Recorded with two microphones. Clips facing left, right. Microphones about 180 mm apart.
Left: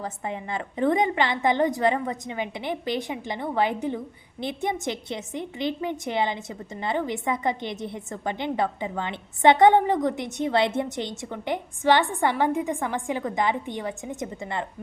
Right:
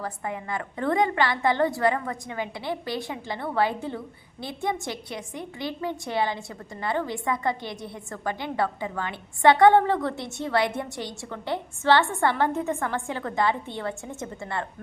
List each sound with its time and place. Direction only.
0.0 s a woman's voice: 20° left (ahead or behind)